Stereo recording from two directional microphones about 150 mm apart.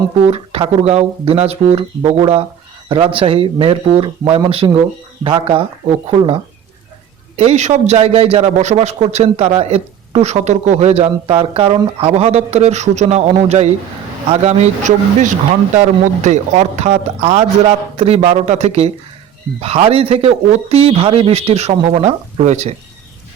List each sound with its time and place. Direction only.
0.3 s speech: 40° right (ahead or behind)
6.1 s speech: 35° right (ahead or behind)
7.3 s a man's voice: 45° right (ahead or behind)